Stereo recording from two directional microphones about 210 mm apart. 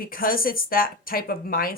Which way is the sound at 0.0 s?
45° left (ahead or behind).